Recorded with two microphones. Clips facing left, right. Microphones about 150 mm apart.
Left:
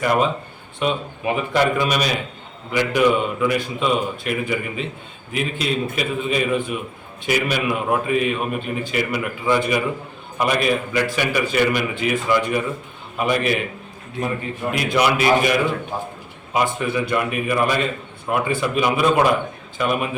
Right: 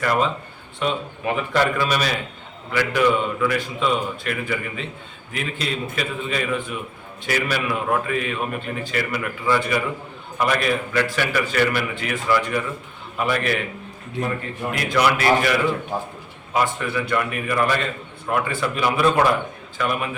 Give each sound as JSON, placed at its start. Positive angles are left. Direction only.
{"t": 0.0, "sound": "a man's voice", "side_deg": 15}
{"t": 14.7, "sound": "a man's voice", "side_deg": 15}